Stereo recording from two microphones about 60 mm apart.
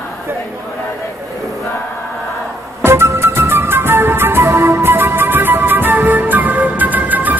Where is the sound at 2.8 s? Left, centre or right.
Right.